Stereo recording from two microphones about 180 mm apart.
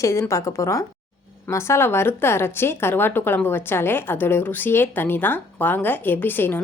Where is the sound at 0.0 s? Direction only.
15° left (ahead or behind).